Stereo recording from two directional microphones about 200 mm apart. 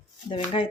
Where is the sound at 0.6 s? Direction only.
30° left (ahead or behind).